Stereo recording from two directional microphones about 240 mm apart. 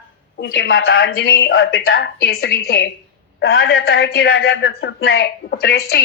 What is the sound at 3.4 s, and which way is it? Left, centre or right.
Speech, left.